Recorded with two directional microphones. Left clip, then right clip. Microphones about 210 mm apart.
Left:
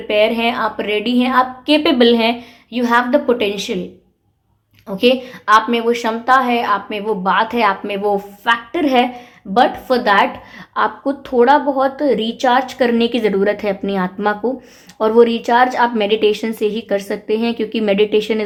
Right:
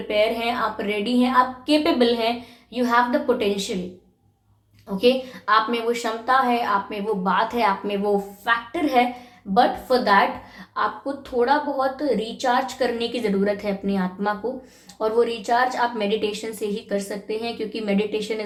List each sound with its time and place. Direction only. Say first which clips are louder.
0.1 s speech: left 7 dB; 40° left (ahead or behind)
4.9 s a woman's voice: left 5 dB; 45° left (ahead or behind)